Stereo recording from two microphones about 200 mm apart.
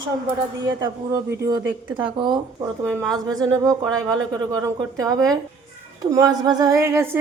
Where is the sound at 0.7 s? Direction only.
15° right (ahead or behind).